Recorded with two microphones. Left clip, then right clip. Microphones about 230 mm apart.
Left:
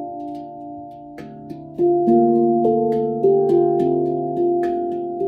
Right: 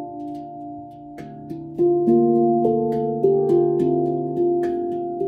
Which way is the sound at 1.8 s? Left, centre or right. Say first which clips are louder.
Left 2 dB; centre.